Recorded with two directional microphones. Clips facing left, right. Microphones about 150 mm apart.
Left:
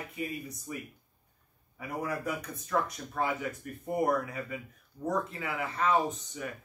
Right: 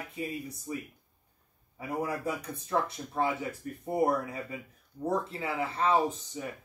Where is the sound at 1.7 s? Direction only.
30° right (ahead or behind).